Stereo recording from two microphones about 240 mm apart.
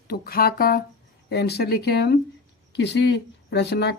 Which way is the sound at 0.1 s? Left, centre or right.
Left.